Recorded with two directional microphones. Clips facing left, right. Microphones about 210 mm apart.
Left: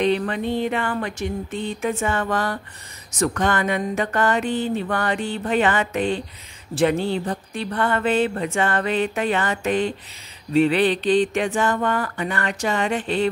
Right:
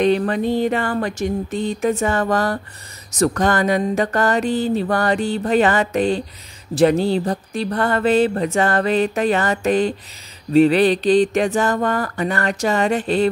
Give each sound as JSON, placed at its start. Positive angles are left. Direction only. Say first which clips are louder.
{"t": 0.0, "sound": "speech", "louder": "right 4 dB", "side_deg": -40}